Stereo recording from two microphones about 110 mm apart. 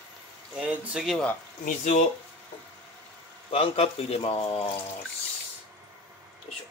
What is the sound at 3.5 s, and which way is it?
Speech, 60° left (ahead or behind).